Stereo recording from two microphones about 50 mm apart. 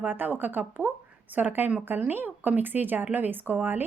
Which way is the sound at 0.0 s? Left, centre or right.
Right.